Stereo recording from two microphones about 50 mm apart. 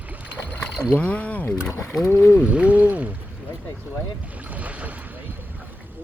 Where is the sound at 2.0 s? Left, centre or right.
Left.